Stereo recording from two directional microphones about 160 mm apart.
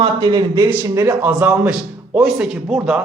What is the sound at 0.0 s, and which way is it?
Speech, 25° right (ahead or behind).